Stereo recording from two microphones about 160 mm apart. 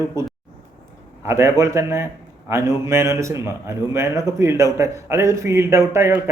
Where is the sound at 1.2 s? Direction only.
15° right (ahead or behind).